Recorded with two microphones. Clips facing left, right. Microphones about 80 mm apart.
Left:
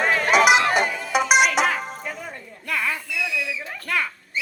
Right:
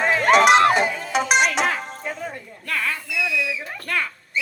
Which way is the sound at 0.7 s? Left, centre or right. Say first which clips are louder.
Right 1 dB; centre.